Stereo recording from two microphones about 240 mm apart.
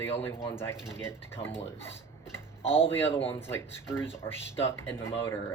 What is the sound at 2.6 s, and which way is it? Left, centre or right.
Speech, left.